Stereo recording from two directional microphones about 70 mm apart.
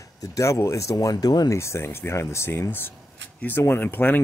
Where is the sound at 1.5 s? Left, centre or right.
Left.